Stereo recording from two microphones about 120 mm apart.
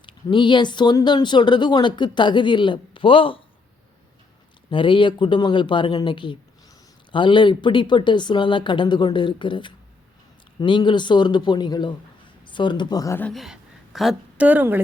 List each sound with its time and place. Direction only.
0.0 s speech: 40° left (ahead or behind)
4.7 s speech: 45° left (ahead or behind)
13.3 s a sound: centre (ahead or behind)
14.4 s speech: 15° right (ahead or behind)